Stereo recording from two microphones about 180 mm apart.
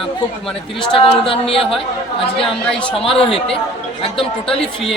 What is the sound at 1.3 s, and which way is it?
Speech, 30° left (ahead or behind).